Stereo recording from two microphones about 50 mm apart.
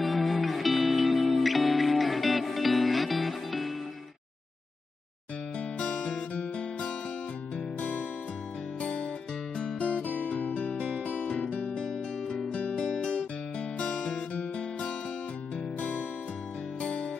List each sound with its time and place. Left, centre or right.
0.0 s music: centre
5.6 s music: centre
8.8 s music: left
11.2 s music: centre
16.8 s music: left